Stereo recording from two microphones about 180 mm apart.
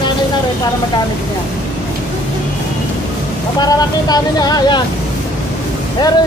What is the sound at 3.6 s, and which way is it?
Speech, 20° left (ahead or behind).